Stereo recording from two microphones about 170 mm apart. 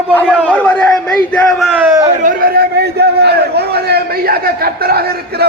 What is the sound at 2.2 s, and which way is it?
A man's voice, 60° right (ahead or behind).